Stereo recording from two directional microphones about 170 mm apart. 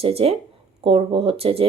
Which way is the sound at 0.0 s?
35° right (ahead or behind).